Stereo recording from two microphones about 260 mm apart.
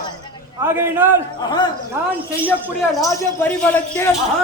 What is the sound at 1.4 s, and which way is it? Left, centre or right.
Speech, centre.